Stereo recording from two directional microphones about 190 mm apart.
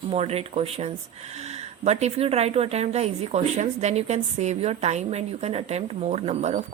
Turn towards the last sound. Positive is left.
turn(degrees=-35)  # may be behind; listen again after turning